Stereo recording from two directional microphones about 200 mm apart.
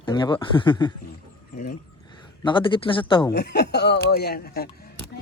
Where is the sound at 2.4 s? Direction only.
25° left (ahead or behind).